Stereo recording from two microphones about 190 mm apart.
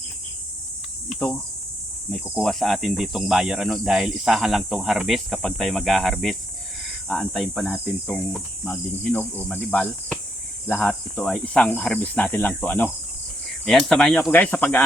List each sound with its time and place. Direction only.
2.1 s speech: centre (ahead or behind)
10.7 s cricket: 10° left (ahead or behind)